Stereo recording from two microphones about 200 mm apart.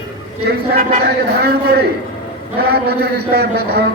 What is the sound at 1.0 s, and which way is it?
A man's voice, 50° right (ahead or behind).